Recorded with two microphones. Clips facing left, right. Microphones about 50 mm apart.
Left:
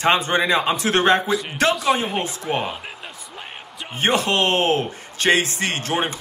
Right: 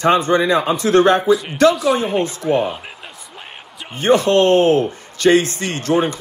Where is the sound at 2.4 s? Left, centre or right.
Centre.